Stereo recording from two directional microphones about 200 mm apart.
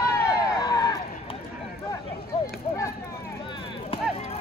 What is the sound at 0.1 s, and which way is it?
Vehicle, 20° left (ahead or behind).